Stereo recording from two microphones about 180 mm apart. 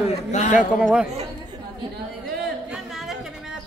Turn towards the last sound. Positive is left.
turn(degrees=0)  # may be behind; listen again after turning